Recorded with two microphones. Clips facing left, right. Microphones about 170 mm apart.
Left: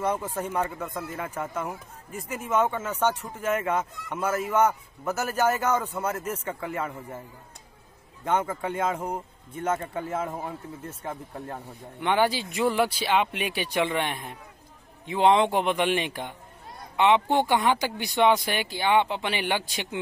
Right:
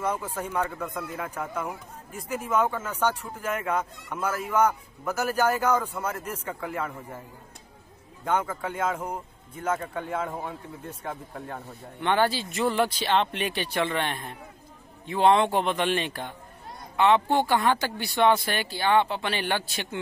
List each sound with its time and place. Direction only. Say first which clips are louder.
0.0 s speech: left 2 dB; 10° left (ahead or behind)
8.3 s speech: left 1 dB; 10° left (ahead or behind)
8.6 s speech: left 1 dB; centre (ahead or behind)
11.5 s speech: even; 15° left (ahead or behind)